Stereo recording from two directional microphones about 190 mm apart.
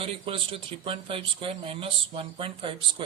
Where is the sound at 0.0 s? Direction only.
30° right (ahead or behind).